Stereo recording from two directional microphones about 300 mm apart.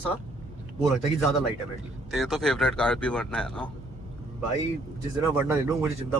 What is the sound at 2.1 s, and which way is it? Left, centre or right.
A man's voice, centre.